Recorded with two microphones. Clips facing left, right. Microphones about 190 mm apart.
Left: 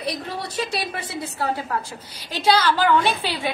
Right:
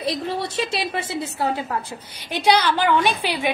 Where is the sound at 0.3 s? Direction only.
25° right (ahead or behind).